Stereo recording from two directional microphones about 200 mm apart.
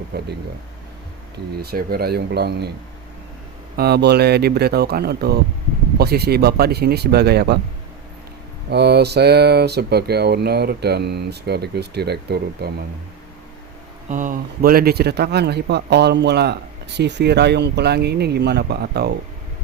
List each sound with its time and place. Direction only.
1.5 s speech: 50° right (ahead or behind)
3.8 s speech: 55° right (ahead or behind)
8.7 s speech: 55° right (ahead or behind)
14.1 s speech: 40° right (ahead or behind)